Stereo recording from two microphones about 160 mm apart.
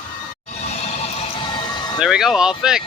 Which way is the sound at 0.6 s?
40° left (ahead or behind).